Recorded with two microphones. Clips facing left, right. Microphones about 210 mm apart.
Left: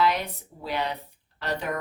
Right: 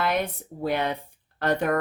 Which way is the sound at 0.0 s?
55° right (ahead or behind).